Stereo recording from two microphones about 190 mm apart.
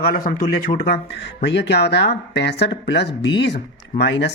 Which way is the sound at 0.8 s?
60° left (ahead or behind).